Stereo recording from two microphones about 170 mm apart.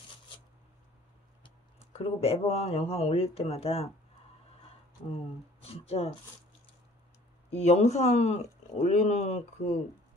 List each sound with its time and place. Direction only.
1.8 s speech: 35° left (ahead or behind)
5.1 s speech: 35° left (ahead or behind)
7.6 s speech: 40° left (ahead or behind)